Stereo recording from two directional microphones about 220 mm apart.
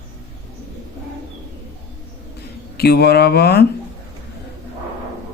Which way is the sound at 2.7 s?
45° left (ahead or behind).